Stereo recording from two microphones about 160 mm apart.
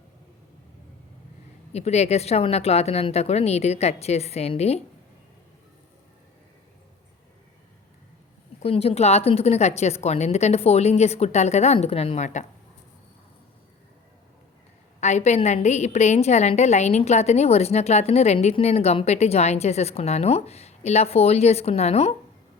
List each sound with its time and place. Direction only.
1.7 s a woman's voice: 40° left (ahead or behind)
8.6 s a woman's voice: 40° left (ahead or behind)
15.0 s a woman's voice: 45° left (ahead or behind)